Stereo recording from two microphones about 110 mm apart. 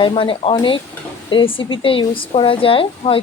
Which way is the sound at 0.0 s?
50° left (ahead or behind).